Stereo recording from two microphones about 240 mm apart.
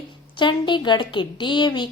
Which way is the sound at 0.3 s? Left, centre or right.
Centre.